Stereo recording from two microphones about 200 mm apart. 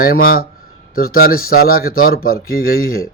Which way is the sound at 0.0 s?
45° left (ahead or behind).